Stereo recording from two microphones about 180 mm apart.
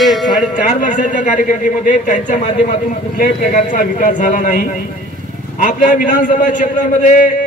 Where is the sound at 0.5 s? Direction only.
45° left (ahead or behind).